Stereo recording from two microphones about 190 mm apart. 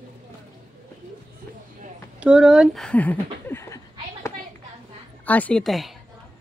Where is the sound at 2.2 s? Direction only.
5° right (ahead or behind); by 4.3 s 15° left (ahead or behind).